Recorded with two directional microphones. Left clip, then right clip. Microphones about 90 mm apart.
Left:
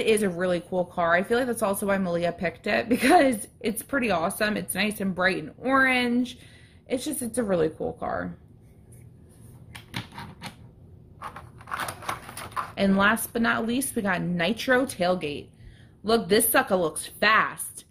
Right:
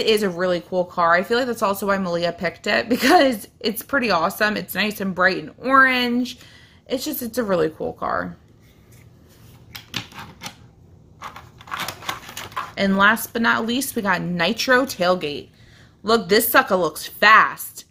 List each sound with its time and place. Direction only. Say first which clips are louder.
0.0 s speech: right 4 dB; 15° right (ahead or behind)
11.1 s a sound: right 3 dB; 20° left (ahead or behind)
11.8 s typewriter: right 4 dB; 15° left (ahead or behind)
12.7 s speech: right 6 dB; 20° right (ahead or behind)